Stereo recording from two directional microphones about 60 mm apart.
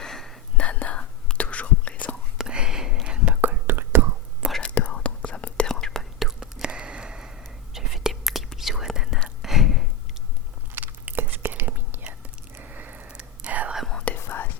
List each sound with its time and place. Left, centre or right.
0.0 s whispering: centre
0.5 s whispering: left
2.4 s whispering: centre
3.4 s whispering: right
4.6 s whispering: left
5.6 s whispering: centre
6.4 s whispering: centre
10.8 s chewing: right
12.5 s a sound: right
13.1 s whispering: centre
14.2 s whispering: left